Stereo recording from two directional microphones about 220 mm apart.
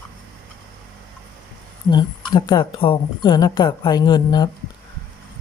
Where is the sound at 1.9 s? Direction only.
20° left (ahead or behind).